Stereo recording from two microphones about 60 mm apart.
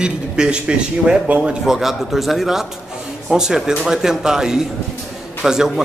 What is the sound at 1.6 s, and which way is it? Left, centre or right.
A man's voice, centre.